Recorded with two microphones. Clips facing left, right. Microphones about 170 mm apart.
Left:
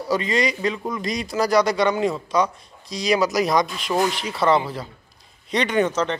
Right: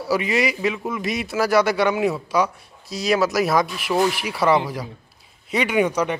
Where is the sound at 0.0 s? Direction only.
10° right (ahead or behind).